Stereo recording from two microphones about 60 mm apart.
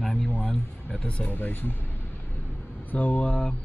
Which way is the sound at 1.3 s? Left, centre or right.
Left.